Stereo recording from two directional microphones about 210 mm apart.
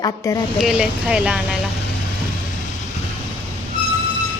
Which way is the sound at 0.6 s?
Centre (ahead or behind).